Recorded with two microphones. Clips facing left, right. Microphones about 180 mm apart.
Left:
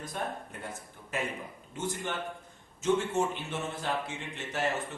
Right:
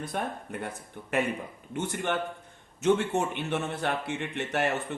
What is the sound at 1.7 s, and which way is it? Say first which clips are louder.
Speech: right 5 dB; 65° right (ahead or behind).